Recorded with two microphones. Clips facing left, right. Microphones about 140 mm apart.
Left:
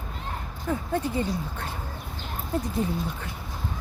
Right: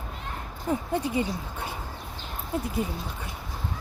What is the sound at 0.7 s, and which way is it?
Speech, 15° right (ahead or behind).